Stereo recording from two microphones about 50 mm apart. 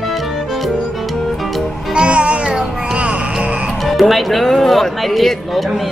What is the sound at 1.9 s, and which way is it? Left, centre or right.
Music, right.